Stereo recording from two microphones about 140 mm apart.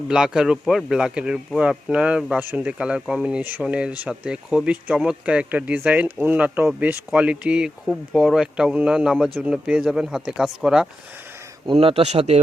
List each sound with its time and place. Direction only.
0.1 s speech: 5° right (ahead or behind)
11.6 s speech: 40° right (ahead or behind)